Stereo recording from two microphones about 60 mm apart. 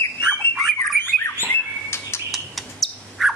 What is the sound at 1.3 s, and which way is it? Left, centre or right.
Bird, left.